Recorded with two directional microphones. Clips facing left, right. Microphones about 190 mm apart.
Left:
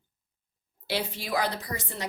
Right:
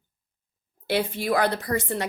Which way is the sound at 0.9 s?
55° right (ahead or behind).